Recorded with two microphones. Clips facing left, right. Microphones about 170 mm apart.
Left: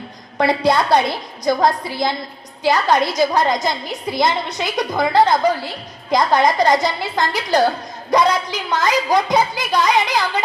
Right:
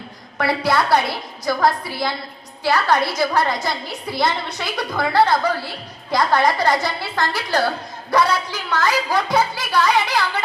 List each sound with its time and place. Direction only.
0.3 s a woman's voice: 20° left (ahead or behind)